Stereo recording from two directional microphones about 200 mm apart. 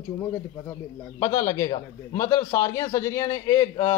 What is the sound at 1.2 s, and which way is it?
A man's voice, 15° left (ahead or behind).